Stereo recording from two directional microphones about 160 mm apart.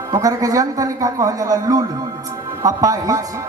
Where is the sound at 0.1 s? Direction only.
20° right (ahead or behind).